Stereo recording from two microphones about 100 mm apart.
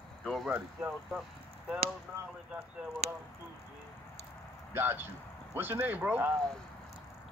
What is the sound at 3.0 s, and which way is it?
Speech, 90° right.